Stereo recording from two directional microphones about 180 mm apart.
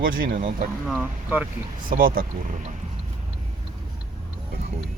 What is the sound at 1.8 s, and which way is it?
Speech, 50° right (ahead or behind).